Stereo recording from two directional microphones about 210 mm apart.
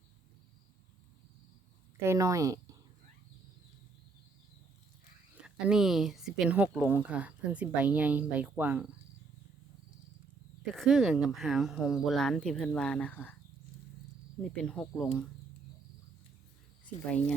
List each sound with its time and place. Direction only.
2.0 s speech: 15° right (ahead or behind)
5.4 s speech: 5° right (ahead or behind)
10.8 s speech: centre (ahead or behind)
14.4 s speech: 5° left (ahead or behind)
17.1 s speech: 5° left (ahead or behind)